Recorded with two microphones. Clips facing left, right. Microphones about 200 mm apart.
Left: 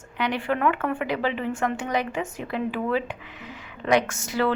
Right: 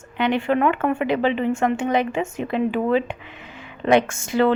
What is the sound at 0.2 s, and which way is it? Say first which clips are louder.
Speech: right 5 dB; 25° right (ahead or behind).